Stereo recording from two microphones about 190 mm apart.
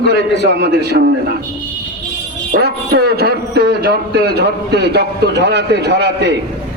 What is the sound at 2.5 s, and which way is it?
A man's voice, 55° right (ahead or behind).